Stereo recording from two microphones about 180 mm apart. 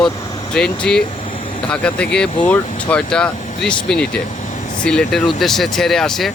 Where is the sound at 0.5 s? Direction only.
5° left (ahead or behind).